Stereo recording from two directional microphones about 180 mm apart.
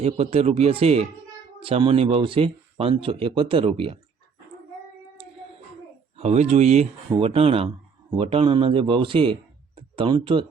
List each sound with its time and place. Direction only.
0.0 s speech: 35° right (ahead or behind)
6.1 s a man's voice: 40° right (ahead or behind)